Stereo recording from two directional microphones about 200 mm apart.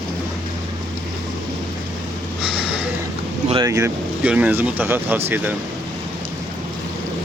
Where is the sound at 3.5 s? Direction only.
15° right (ahead or behind).